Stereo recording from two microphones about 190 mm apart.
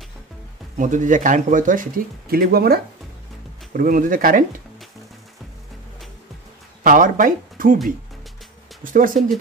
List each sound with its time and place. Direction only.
0.7 s speech: 40° right (ahead or behind)
6.8 s speech: 45° right (ahead or behind)
8.8 s speech: 45° right (ahead or behind)